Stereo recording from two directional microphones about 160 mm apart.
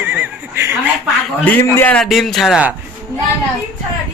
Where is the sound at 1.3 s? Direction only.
10° left (ahead or behind); by 2.7 s 5° right (ahead or behind).